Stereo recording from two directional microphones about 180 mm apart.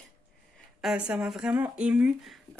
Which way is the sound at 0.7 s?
5° right (ahead or behind).